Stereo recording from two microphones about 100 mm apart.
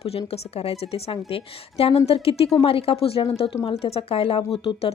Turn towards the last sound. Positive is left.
turn(degrees=65)  # may be behind; listen again after turning